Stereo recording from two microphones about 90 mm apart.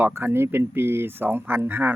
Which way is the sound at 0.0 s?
25° right (ahead or behind).